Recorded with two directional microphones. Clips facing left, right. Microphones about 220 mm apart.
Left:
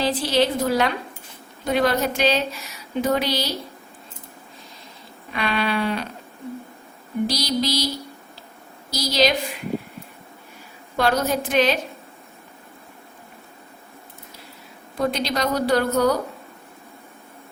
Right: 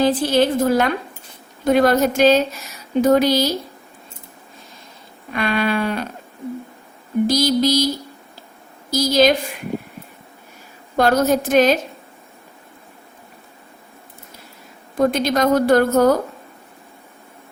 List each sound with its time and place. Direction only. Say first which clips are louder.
0.0 s a woman's voice: right 4 dB; 50° right (ahead or behind)
5.3 s a woman's voice: right 4 dB; 50° right (ahead or behind)
7.3 s a woman's voice: right 8 dB; 50° right (ahead or behind)
9.0 s a woman's voice: right 5 dB; 50° right (ahead or behind)
10.9 s a woman's voice: right 5 dB; 45° right (ahead or behind)
14.9 s a woman's voice: right 6 dB; 50° right (ahead or behind)